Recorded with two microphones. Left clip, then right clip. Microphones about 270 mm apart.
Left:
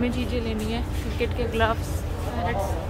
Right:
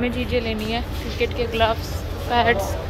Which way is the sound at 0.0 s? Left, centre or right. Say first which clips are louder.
Right 5 dB; centre.